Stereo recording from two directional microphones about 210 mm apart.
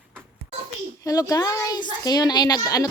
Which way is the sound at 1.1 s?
15° left (ahead or behind).